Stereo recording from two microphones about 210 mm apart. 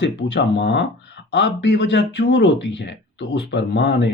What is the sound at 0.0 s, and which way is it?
Speech, 55° left (ahead or behind).